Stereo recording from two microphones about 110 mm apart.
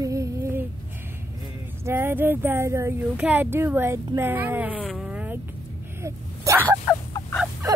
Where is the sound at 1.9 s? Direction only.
20° right (ahead or behind).